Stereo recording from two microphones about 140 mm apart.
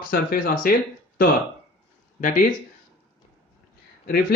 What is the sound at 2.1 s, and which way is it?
Speech, 70° left (ahead or behind).